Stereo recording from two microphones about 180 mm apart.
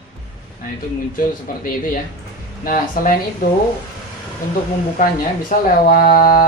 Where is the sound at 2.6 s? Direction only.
50° left (ahead or behind).